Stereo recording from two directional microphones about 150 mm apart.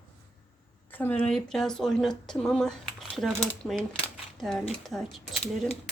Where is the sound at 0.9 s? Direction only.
10° left (ahead or behind).